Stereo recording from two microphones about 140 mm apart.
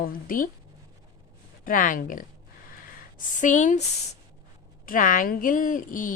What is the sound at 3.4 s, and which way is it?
Speech, 65° left (ahead or behind).